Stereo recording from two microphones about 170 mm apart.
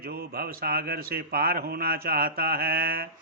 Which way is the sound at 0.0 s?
65° right (ahead or behind).